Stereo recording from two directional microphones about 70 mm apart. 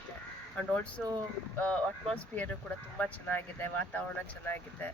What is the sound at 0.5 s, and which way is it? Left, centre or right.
Speech, left.